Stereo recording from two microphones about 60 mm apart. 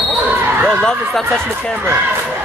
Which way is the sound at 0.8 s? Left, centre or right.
Centre.